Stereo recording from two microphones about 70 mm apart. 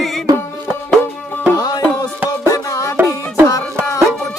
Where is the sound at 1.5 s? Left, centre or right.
Left.